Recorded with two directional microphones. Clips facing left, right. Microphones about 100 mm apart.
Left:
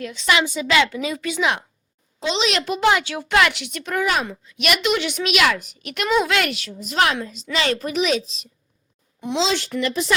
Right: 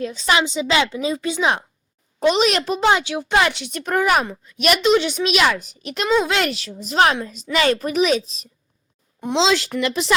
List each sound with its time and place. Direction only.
0.0 s speech: 35° right (ahead or behind)
0.4 s a woman's voice: 20° right (ahead or behind)
2.2 s a child's voice: 50° right (ahead or behind)
2.6 s speech: 30° right (ahead or behind)
9.4 s a woman's voice: 90° right